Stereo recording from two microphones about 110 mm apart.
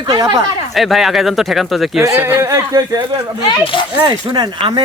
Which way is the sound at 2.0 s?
25° right (ahead or behind).